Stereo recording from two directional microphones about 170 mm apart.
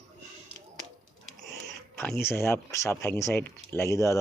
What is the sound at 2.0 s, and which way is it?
Speech, 15° left (ahead or behind).